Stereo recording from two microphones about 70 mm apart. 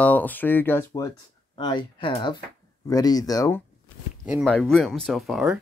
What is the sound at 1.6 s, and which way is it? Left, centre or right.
Speech, left.